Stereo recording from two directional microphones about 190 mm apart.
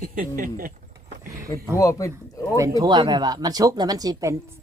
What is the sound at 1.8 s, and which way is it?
Speech, 15° left (ahead or behind).